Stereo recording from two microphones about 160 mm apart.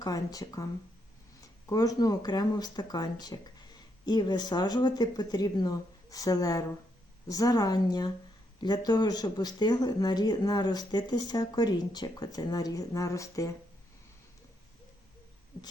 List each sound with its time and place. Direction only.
0.0 s speech: 20° left (ahead or behind)
1.7 s speech: 20° left (ahead or behind)